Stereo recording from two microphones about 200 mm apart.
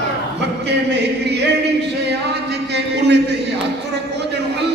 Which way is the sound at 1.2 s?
55° right (ahead or behind).